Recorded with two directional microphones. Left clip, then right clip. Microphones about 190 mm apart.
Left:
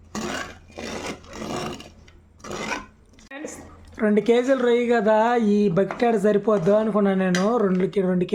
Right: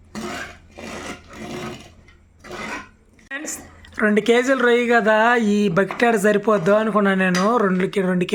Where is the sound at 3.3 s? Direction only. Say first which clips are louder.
Right 5 dB; centre (ahead or behind).